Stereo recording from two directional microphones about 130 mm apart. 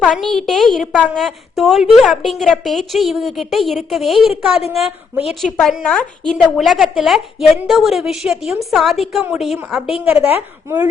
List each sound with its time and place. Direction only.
0.0 s a woman's voice: centre (ahead or behind)
6.3 s a woman's voice: 5° right (ahead or behind)
10.0 s a woman's voice: 15° right (ahead or behind)